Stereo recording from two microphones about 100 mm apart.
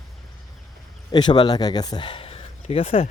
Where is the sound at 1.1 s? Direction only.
45° left (ahead or behind); by 3.1 s 75° left (ahead or behind).